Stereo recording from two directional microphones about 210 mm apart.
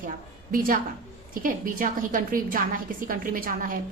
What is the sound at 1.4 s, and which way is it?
A woman's voice, 40° right (ahead or behind).